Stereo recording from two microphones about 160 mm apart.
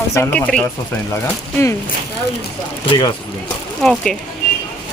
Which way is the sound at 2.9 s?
25° left (ahead or behind).